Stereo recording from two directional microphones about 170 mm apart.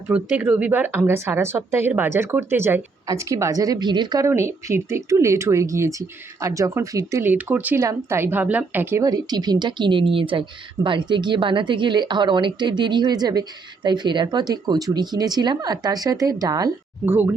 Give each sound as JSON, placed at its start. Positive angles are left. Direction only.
{"t": 0.1, "sound": "speech", "side_deg": -10}